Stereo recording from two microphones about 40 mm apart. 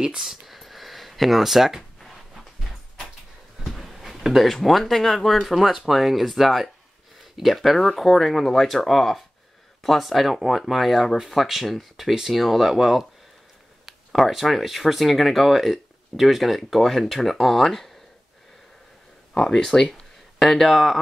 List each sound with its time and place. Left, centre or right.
0.0 s speech: centre
0.5 s a sound: centre
4.6 s speech: centre
14.1 s speech: centre
19.3 s speech: centre
19.9 s speech: centre